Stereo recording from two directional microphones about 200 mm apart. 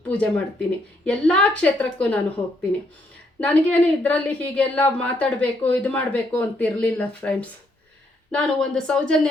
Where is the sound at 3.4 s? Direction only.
5° left (ahead or behind).